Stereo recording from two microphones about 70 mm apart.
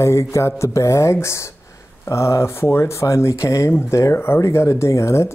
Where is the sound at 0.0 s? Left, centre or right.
Left.